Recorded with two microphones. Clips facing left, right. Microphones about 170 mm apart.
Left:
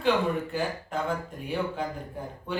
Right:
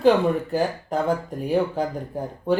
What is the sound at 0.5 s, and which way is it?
Speech, 40° right (ahead or behind).